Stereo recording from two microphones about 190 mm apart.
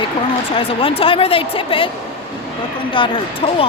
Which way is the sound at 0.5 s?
30° left (ahead or behind).